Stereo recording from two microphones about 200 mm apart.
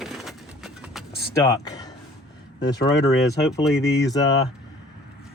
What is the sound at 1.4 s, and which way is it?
Speech, 15° left (ahead or behind).